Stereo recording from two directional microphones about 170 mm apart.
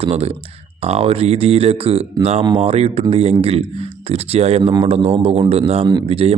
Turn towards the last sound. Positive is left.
turn(degrees=-35)  # may be behind; listen again after turning